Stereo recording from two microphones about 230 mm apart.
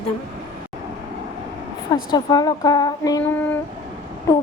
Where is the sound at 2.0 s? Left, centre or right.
Centre.